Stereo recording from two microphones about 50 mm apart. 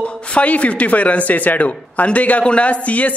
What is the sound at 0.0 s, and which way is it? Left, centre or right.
Speech, left.